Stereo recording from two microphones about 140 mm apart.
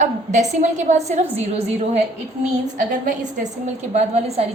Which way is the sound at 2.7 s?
65° right (ahead or behind).